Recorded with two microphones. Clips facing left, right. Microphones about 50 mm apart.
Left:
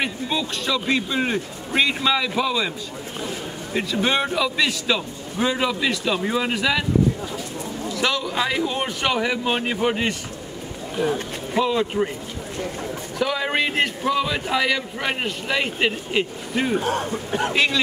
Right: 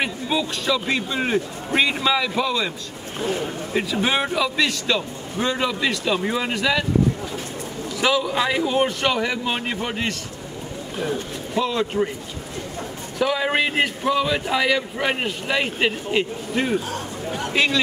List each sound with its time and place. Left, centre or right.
0.0 s a man's voice: centre
3.7 s a man's voice: centre
8.0 s a man's voice: centre
11.6 s a man's voice: centre
13.2 s a man's voice: centre
16.8 s speech: left